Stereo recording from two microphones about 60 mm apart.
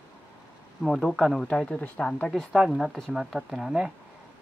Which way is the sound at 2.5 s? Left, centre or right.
Centre.